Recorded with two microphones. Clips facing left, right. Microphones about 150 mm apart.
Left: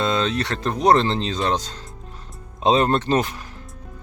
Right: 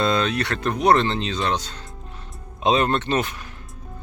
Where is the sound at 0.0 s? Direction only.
25° left (ahead or behind).